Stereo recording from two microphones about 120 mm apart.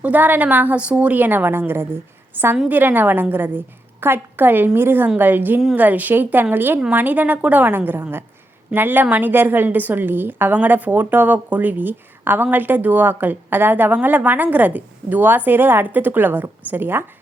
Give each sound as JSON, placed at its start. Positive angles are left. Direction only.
{"t": 0.0, "sound": "a woman's voice", "side_deg": -15}